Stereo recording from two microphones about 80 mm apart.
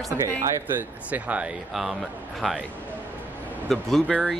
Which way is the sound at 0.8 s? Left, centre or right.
Centre.